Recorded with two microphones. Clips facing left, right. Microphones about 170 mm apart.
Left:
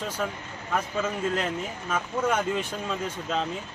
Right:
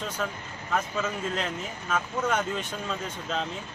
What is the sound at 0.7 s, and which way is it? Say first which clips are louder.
Speech: left 1 dB; 10° left (ahead or behind).